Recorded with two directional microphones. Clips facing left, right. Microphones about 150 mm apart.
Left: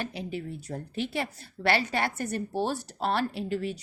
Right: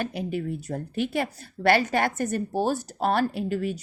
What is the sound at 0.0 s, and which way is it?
A woman's voice, 50° right (ahead or behind).